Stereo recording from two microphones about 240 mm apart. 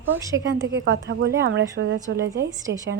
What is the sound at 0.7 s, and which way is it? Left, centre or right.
Speech, right.